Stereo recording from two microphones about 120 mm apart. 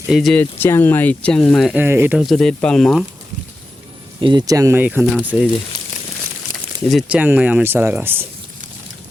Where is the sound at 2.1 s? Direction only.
Centre (ahead or behind).